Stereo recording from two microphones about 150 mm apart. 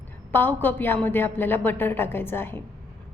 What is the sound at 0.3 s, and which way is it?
A woman's voice, 15° left (ahead or behind).